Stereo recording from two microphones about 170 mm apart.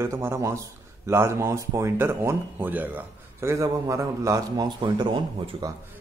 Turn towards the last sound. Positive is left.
turn(degrees=-25)  # may be behind; listen again after turning